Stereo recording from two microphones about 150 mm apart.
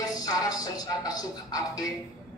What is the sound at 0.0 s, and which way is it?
Music, 25° left (ahead or behind).